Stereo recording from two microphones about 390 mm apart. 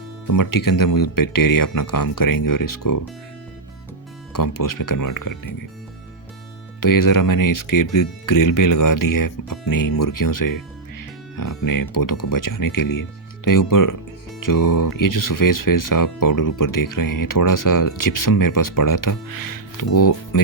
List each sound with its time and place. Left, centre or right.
0.3 s speech: left
4.3 s speech: left
6.7 s speech: left